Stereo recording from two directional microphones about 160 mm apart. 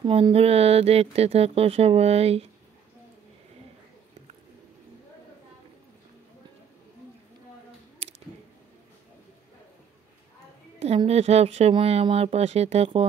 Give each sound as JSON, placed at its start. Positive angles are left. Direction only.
{"t": 0.0, "sound": "speech", "side_deg": -35}
{"t": 8.0, "sound": "a sound", "side_deg": -40}
{"t": 11.1, "sound": "speech", "side_deg": -40}